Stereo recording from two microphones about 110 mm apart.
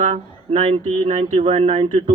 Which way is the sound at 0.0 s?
90° right.